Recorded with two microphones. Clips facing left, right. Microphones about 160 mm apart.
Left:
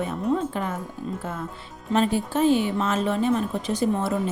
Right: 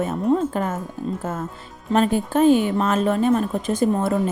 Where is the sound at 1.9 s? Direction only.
50° right (ahead or behind).